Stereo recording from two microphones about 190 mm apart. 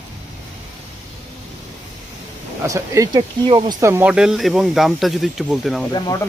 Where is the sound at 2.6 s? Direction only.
15° right (ahead or behind).